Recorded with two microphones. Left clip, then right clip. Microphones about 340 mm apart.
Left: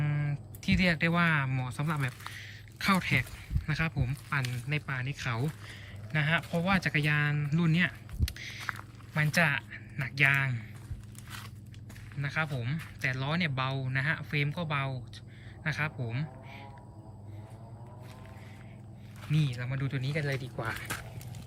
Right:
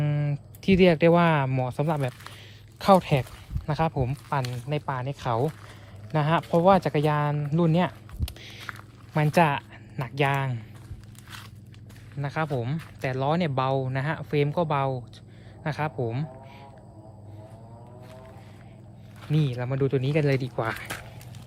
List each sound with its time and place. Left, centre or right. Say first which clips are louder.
0.0 s speech: right 6 dB; centre
12.2 s speech: right 5 dB; centre
19.2 s speech: right 6 dB; centre
20.4 s speech: right 8 dB; right